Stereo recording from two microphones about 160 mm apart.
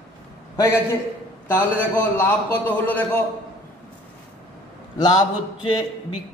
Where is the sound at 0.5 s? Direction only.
15° left (ahead or behind).